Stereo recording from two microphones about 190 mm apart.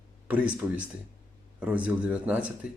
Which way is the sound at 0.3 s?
5° right (ahead or behind).